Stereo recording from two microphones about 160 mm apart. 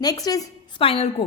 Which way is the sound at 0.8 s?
35° left (ahead or behind).